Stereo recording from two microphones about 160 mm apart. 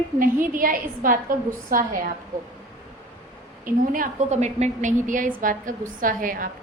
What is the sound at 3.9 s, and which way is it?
A woman's voice, 50° right (ahead or behind).